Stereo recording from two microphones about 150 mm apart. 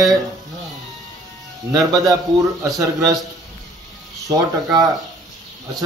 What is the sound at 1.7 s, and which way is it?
Speech, 25° right (ahead or behind).